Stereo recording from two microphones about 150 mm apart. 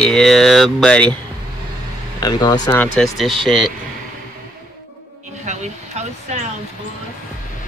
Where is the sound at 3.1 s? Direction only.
Centre (ahead or behind).